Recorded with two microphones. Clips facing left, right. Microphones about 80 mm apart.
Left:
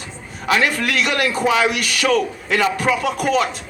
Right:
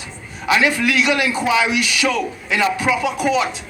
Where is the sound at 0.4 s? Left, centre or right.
Left.